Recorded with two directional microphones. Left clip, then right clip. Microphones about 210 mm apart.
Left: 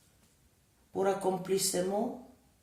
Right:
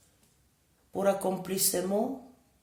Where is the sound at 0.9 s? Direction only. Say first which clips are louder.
Right 2 dB; 40° right (ahead or behind).